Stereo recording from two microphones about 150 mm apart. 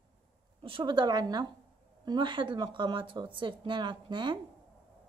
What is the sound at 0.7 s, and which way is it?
A woman's voice, 35° right (ahead or behind).